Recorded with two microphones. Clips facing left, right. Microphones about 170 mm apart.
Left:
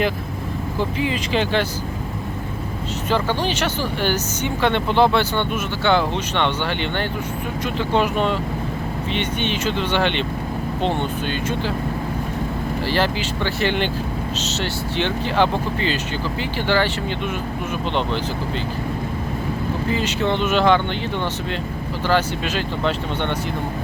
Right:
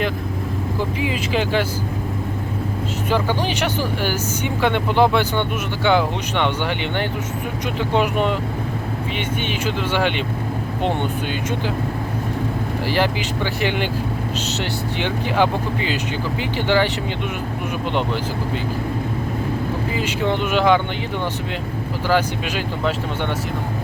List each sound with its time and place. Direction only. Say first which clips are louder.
0.9 s speech: left 1 dB; 10° right (ahead or behind)
3.1 s speech: even; 15° right (ahead or behind)
7.8 s speech: even; 15° right (ahead or behind)
12.9 s speech: right 1 dB; 15° right (ahead or behind)
19.9 s speech: left 2 dB; 10° right (ahead or behind)
22.0 s speech: even; 10° right (ahead or behind)